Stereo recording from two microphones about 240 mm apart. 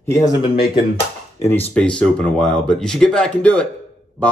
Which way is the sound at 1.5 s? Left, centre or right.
Centre.